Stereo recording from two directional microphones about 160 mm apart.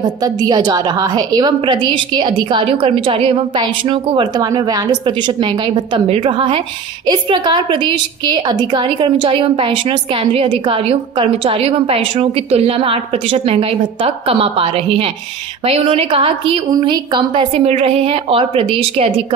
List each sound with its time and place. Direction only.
0.0 s a woman's voice: 25° right (ahead or behind)